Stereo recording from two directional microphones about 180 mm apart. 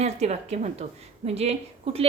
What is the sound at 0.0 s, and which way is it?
A woman's voice, 35° right (ahead or behind).